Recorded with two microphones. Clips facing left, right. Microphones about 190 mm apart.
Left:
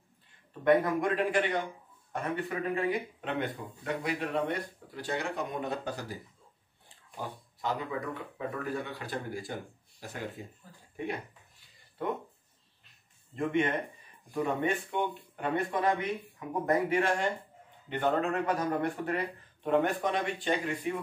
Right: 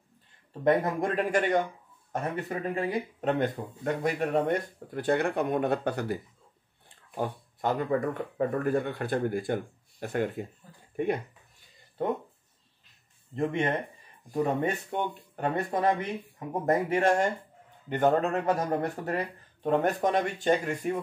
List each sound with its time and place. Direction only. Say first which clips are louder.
0.5 s speech: even; 25° right (ahead or behind)
1.0 s speech: right 2 dB; 45° right (ahead or behind); by 6.1 s 60° right (ahead or behind)
7.2 s speech: right 8 dB; 55° right (ahead or behind)
13.4 s speech: right 1 dB; 35° right (ahead or behind)